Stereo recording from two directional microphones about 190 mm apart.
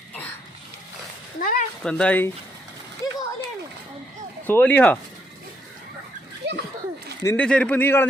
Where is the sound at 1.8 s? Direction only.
5° left (ahead or behind).